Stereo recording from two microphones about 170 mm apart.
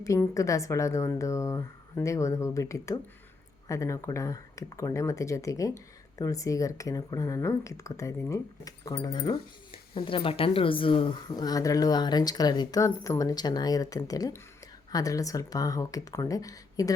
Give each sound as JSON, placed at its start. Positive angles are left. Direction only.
{"t": 0.0, "sound": "a woman's voice", "side_deg": 20}